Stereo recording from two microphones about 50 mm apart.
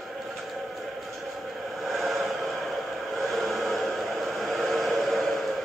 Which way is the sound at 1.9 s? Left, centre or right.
Centre.